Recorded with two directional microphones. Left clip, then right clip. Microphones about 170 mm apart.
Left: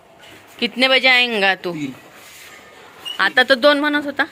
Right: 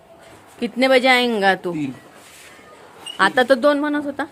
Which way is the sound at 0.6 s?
15° right (ahead or behind).